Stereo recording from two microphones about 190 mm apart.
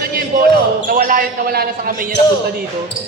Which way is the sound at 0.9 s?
50° right (ahead or behind).